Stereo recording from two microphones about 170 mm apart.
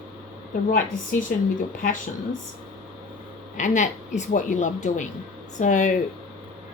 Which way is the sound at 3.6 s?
45° left (ahead or behind).